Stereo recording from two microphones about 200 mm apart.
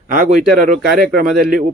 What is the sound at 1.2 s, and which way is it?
Speech, centre (ahead or behind).